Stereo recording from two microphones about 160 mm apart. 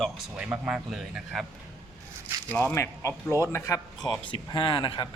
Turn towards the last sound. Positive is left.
turn(degrees=30)  # may be behind; listen again after turning